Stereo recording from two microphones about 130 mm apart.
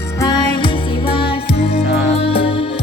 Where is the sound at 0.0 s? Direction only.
25° left (ahead or behind).